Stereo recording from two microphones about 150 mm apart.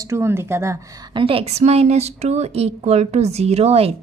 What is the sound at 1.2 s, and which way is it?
A woman's voice, 35° right (ahead or behind).